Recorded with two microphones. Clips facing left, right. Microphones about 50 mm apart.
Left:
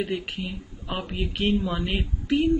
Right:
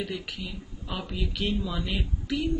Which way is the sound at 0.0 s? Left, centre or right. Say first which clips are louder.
Left 5 dB; left.